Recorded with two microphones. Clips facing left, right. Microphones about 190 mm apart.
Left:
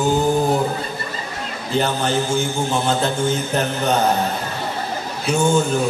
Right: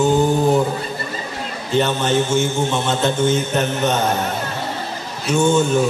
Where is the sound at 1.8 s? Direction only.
35° left (ahead or behind).